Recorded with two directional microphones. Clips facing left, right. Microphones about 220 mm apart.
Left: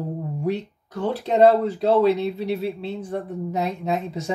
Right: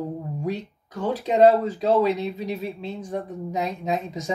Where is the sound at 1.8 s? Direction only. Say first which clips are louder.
Left 3 dB; 65° left (ahead or behind).